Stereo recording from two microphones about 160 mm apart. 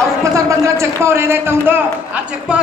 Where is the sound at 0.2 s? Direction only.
20° right (ahead or behind).